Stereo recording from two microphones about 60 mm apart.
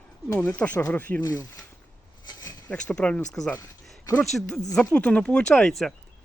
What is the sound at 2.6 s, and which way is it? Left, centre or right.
Speech, centre.